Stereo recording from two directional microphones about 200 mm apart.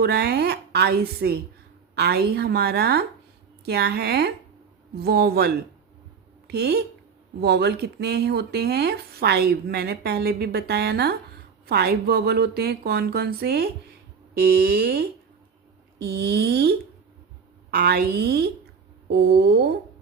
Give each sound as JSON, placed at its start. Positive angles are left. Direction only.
{"t": 0.0, "sound": "speech", "side_deg": -50}